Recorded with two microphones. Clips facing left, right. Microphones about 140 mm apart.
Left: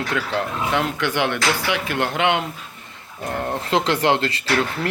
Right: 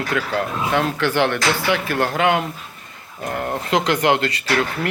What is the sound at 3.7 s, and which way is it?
Speech, 30° left (ahead or behind).